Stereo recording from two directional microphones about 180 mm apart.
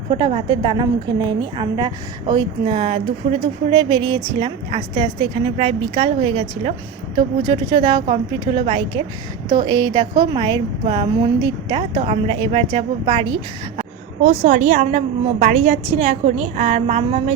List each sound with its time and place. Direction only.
0.1 s a woman's voice: 30° right (ahead or behind)
11.7 s a woman's voice: 35° right (ahead or behind)
14.4 s a woman's voice: 40° right (ahead or behind)